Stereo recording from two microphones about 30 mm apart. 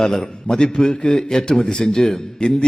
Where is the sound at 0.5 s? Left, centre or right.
Left.